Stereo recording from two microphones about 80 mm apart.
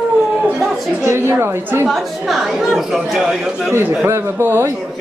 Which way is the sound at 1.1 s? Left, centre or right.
Right.